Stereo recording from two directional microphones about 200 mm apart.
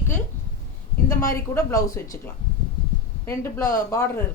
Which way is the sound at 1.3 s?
15° left (ahead or behind).